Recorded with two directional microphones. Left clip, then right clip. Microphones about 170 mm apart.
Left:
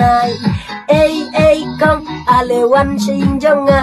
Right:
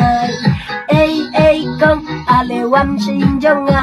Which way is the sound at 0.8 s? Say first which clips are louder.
Left 2 dB; 20° left (ahead or behind).